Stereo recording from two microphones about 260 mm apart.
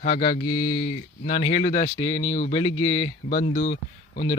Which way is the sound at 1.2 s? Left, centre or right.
Left.